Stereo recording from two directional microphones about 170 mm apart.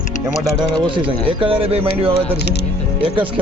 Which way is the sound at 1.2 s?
30° right (ahead or behind).